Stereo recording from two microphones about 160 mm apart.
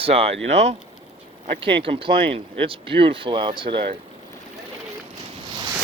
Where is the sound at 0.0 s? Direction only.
35° right (ahead or behind).